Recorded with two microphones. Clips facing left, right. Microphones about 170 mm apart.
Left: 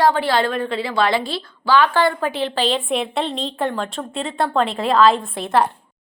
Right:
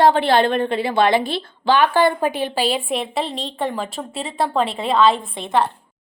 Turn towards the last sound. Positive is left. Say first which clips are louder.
# left 1 dB
turn(degrees=5)  # may be behind; listen again after turning